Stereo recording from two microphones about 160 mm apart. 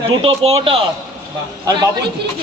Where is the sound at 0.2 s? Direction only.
40° right (ahead or behind).